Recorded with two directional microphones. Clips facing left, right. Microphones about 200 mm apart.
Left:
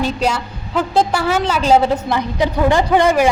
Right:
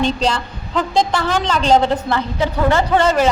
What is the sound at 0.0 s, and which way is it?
A woman's voice, 10° left (ahead or behind).